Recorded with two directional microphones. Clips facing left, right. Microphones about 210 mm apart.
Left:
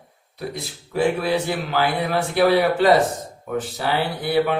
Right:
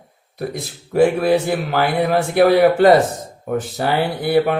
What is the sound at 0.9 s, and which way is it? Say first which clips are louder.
Speech: right 6 dB; 50° right (ahead or behind).